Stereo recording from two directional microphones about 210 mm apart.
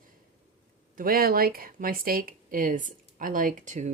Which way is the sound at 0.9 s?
45° right (ahead or behind).